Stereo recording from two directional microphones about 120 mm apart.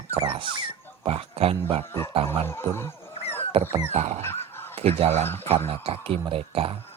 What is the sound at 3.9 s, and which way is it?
Speech, 60° right (ahead or behind).